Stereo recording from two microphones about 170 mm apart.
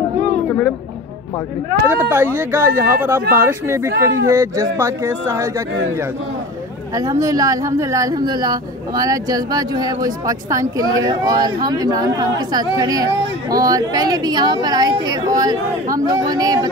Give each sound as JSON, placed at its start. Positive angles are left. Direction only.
{"t": 1.9, "sound": "speech", "side_deg": -10}
{"t": 7.0, "sound": "a woman's voice", "side_deg": -20}